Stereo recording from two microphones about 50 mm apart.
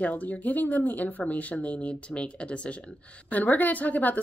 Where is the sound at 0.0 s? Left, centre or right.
Left.